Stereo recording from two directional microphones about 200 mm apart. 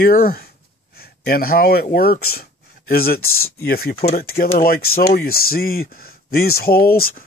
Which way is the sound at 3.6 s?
50° left (ahead or behind).